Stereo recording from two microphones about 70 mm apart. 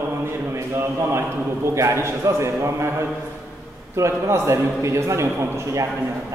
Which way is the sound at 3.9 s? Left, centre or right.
Right.